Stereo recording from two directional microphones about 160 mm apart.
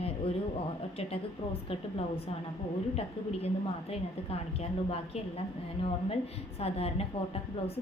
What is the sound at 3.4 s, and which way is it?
A woman's voice, 40° left (ahead or behind).